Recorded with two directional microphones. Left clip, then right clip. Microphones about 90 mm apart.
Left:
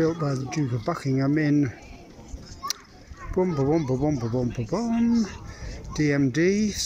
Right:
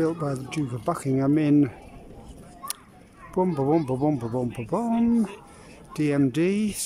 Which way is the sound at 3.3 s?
20° right (ahead or behind).